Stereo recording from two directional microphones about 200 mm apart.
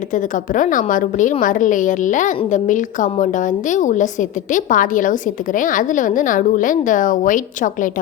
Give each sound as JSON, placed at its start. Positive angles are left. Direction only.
{"t": 0.1, "sound": "a woman's voice", "side_deg": 40}